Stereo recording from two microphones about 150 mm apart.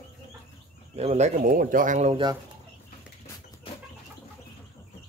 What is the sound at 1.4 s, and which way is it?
Speech, 70° right (ahead or behind).